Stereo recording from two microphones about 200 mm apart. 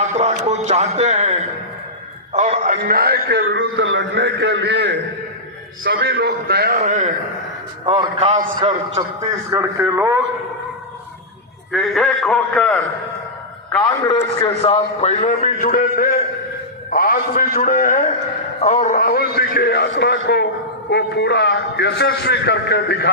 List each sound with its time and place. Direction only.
0.0 s a sound: 35° right (ahead or behind)
2.3 s a man's voice: 35° right (ahead or behind)
2.8 s a man's voice: 50° right (ahead or behind)
3.4 s a man's voice: 70° right (ahead or behind)
5.8 s a man's voice: 50° right (ahead or behind)
6.7 s a man's voice: 35° right (ahead or behind)
9.5 s a man's voice: 15° right (ahead or behind)
11.7 s a man's voice: centre (ahead or behind)
13.7 s a man's voice: 20° left (ahead or behind); by 23.0 s 55° left (ahead or behind)